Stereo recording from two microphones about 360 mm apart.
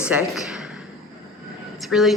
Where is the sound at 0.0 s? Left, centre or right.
Centre.